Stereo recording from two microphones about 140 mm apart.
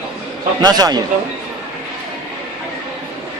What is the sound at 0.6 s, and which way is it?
Speech, 30° right (ahead or behind).